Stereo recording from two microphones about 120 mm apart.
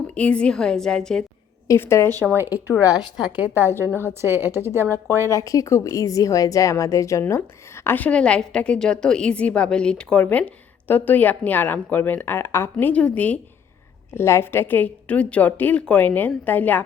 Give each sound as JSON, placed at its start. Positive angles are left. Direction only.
{"t": 0.1, "sound": "a woman's voice", "side_deg": 10}
{"t": 1.6, "sound": "a woman's voice", "side_deg": 20}
{"t": 2.3, "sound": "a woman's voice", "side_deg": -20}
{"t": 2.8, "sound": "a woman's voice", "side_deg": 30}
{"t": 3.3, "sound": "a woman's voice", "side_deg": -15}
{"t": 5.3, "sound": "a woman's voice", "side_deg": 25}
{"t": 7.9, "sound": "a woman's voice", "side_deg": 15}